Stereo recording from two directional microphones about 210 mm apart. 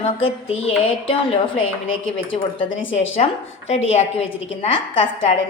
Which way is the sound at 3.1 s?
30° left (ahead or behind).